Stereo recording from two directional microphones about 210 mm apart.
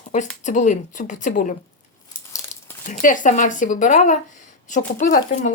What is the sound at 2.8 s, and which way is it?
Speech, 40° left (ahead or behind).